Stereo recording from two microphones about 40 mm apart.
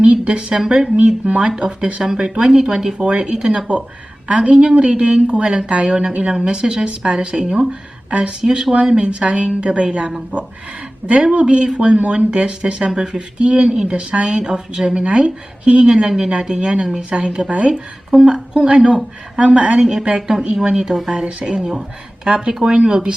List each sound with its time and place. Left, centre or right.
0.0 s a woman's voice: right
3.0 s speech: right
8.4 s speech: centre
11.2 s speech: right
18.1 s a woman's voice: centre
18.5 s speech: right